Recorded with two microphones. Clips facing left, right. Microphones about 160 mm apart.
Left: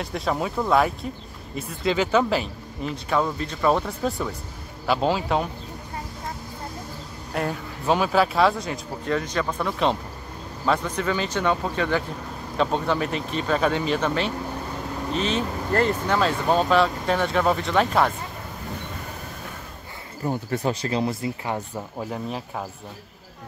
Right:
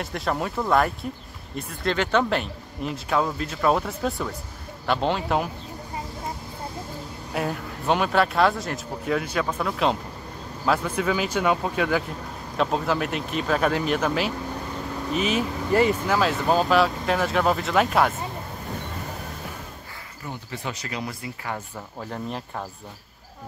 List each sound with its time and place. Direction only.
0.0 s speech: centre (ahead or behind)
7.3 s speech: centre (ahead or behind)
20.2 s speech: 45° left (ahead or behind)
20.8 s speech: 30° left (ahead or behind)
22.1 s speech: 5° left (ahead or behind)